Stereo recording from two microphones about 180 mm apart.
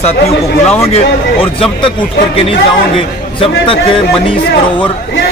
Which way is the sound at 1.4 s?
30° left (ahead or behind).